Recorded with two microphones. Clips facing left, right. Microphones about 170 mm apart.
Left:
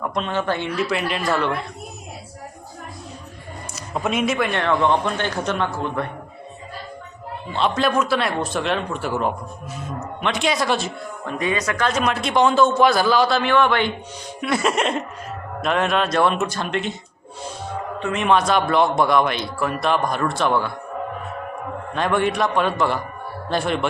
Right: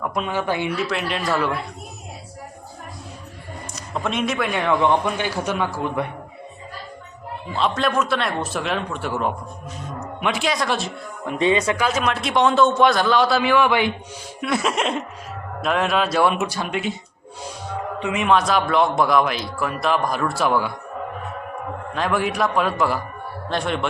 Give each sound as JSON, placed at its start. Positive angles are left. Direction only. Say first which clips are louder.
{"t": 0.0, "sound": "a man's voice", "louder": "left 1 dB", "side_deg": -5}
{"t": 0.8, "sound": "a man's voice", "louder": "left 2 dB", "side_deg": 0}
{"t": 3.8, "sound": "a man's voice", "louder": "left 2 dB", "side_deg": 5}
{"t": 7.5, "sound": "a man's voice", "louder": "left 1 dB", "side_deg": 0}
{"t": 11.3, "sound": "speech", "louder": "right 4 dB", "side_deg": -25}
{"t": 11.8, "sound": "a man's voice", "louder": "left 1 dB", "side_deg": -5}
{"t": 14.4, "sound": "a man's voice", "louder": "left 1 dB", "side_deg": 0}
{"t": 18.0, "sound": "a man's voice", "louder": "even", "side_deg": -5}
{"t": 21.9, "sound": "a man's voice", "louder": "left 2 dB", "side_deg": -5}